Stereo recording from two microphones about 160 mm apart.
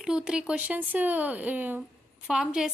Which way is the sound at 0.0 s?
5° right (ahead or behind).